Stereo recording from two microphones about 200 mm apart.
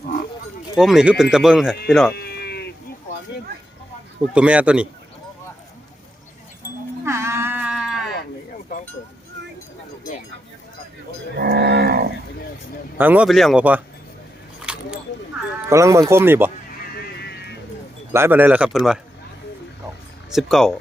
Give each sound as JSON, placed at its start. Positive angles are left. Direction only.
{"t": 0.8, "sound": "speech", "side_deg": 0}
{"t": 2.1, "sound": "sheep", "side_deg": 50}
{"t": 4.4, "sound": "speech", "side_deg": -5}
{"t": 7.0, "sound": "livestock", "side_deg": -15}
{"t": 11.3, "sound": "cattle", "side_deg": -55}
{"t": 13.0, "sound": "speech", "side_deg": -10}
{"t": 14.6, "sound": "a sound", "side_deg": -5}
{"t": 15.7, "sound": "speech", "side_deg": -15}
{"t": 17.0, "sound": "music", "side_deg": 55}
{"t": 18.1, "sound": "speech", "side_deg": -10}
{"t": 20.3, "sound": "speech", "side_deg": 0}